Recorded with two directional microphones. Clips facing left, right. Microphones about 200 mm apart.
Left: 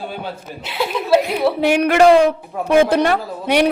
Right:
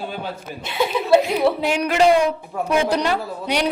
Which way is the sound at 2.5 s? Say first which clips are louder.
Left 1 dB; centre (ahead or behind).